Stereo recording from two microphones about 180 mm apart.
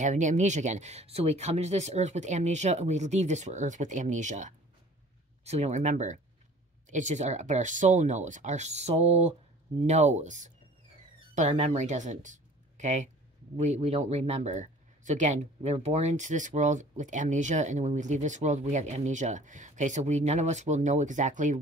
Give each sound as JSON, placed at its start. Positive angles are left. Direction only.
{"t": 0.0, "sound": "speech", "side_deg": -40}